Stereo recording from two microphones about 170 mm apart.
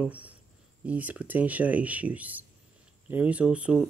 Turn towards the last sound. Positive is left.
turn(degrees=-5)  # may be behind; listen again after turning